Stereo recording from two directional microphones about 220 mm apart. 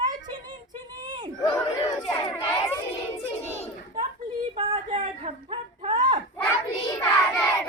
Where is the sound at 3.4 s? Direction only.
30° left (ahead or behind).